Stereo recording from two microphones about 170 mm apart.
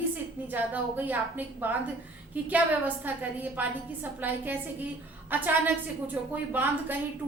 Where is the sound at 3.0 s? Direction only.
10° right (ahead or behind).